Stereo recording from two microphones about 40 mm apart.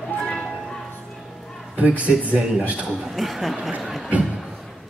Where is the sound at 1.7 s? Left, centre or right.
Right.